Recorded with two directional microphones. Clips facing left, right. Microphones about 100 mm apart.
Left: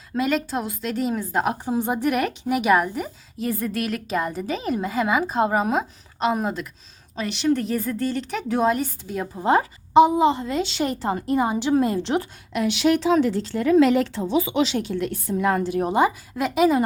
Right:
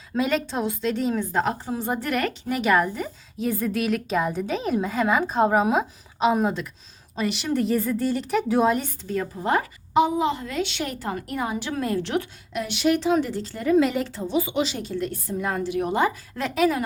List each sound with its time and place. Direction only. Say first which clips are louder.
0.2 s a woman's voice: even; centre (ahead or behind)
9.0 s a woman's voice: right 1 dB; 10° left (ahead or behind)
9.3 s a woman's voice: left 7 dB; 25° left (ahead or behind)
12.5 s speech: left 3 dB; 90° left
15.5 s a woman's voice: left 3 dB; 45° left (ahead or behind)
15.9 s a woman's voice: left 3 dB; 15° left (ahead or behind)